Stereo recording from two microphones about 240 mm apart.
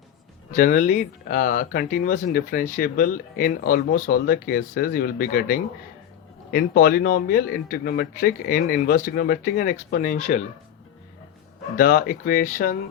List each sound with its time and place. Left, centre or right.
0.5 s speech: left
11.8 s speech: left